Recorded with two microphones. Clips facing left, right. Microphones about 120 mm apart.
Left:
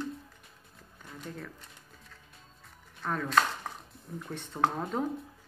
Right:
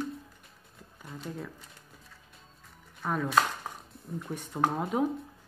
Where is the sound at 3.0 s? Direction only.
10° right (ahead or behind).